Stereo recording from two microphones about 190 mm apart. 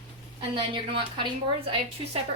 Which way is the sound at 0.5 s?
25° right (ahead or behind).